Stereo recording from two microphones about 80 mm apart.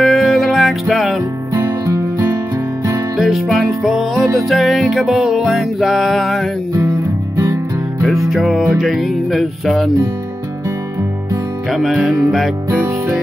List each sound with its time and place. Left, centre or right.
0.0 s music: centre
1.5 s music: right
3.2 s music: centre
6.7 s music: right
8.3 s music: centre
11.7 s music: centre